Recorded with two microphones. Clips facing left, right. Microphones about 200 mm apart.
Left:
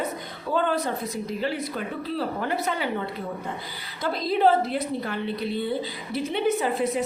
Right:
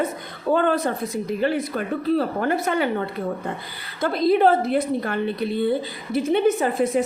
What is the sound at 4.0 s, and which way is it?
A woman's voice, 55° right (ahead or behind).